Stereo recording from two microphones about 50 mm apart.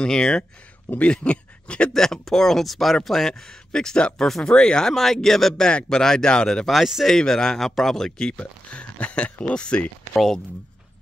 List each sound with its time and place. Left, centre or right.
0.0 s speech: centre
2.0 s speech: centre
5.7 s speech: centre
6.6 s speech: centre
7.2 s speech: centre
8.3 s speech: left
10.1 s speech: centre